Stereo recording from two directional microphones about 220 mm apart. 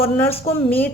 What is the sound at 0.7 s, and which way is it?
Speech, 10° left (ahead or behind).